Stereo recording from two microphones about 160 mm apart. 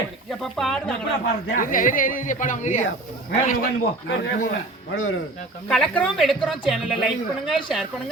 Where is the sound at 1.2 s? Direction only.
60° left (ahead or behind).